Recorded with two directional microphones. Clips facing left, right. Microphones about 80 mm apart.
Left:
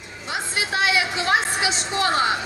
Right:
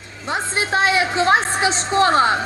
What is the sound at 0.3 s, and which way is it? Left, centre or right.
A woman's voice, right.